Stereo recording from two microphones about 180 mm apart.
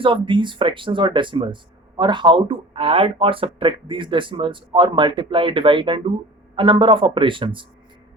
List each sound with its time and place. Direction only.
0.0 s speech: 25° right (ahead or behind)